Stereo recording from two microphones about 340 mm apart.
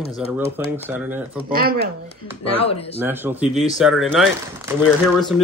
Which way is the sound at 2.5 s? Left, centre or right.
Centre.